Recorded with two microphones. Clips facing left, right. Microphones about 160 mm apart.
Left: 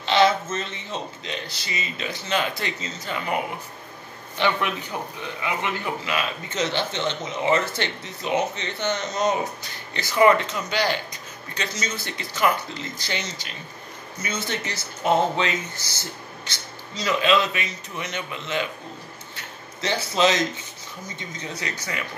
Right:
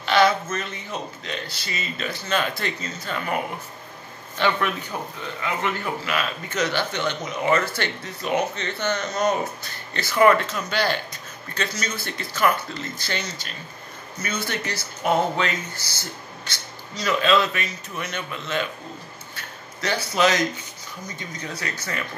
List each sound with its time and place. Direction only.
0.0 s a man's voice: 25° left (ahead or behind)
4.4 s a man's voice: 15° left (ahead or behind)